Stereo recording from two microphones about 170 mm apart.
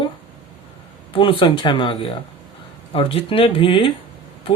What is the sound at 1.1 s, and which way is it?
Speech, 30° left (ahead or behind).